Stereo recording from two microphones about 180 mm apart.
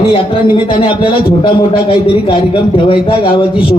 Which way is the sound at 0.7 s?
30° left (ahead or behind).